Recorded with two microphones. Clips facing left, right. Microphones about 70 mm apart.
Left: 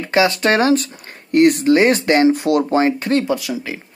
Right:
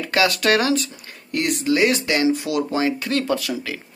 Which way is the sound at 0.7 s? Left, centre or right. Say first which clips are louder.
Left 3 dB; left.